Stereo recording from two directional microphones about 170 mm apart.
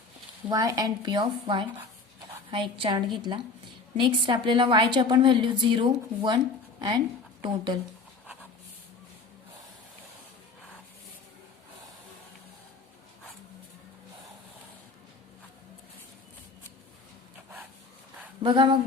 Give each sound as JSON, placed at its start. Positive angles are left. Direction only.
{"t": 0.4, "sound": "a woman's voice", "side_deg": -20}
{"t": 7.4, "sound": "a woman's voice", "side_deg": -25}
{"t": 18.4, "sound": "a woman's voice", "side_deg": -30}